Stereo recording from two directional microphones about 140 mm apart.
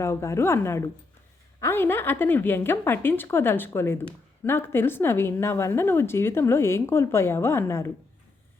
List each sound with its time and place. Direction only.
0.0 s a woman's voice: 20° left (ahead or behind)